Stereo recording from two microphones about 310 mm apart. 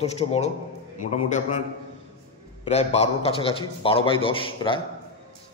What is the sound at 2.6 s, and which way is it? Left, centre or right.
A man's voice, centre.